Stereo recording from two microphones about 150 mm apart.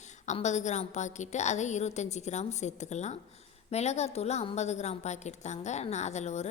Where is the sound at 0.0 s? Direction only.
50° left (ahead or behind).